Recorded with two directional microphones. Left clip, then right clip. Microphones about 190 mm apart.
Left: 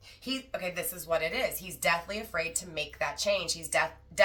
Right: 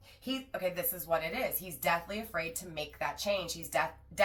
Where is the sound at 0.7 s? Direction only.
20° left (ahead or behind).